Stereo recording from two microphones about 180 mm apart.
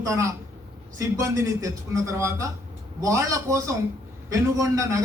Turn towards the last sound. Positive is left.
turn(degrees=-15)  # may be behind; listen again after turning